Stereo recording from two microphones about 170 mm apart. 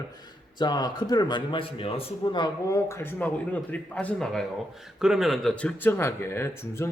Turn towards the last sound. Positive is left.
turn(degrees=15)  # may be behind; listen again after turning